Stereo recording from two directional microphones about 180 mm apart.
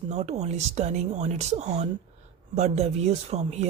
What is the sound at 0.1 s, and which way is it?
Speech, 40° right (ahead or behind).